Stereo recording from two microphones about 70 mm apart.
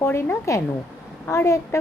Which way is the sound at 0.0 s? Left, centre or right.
Left.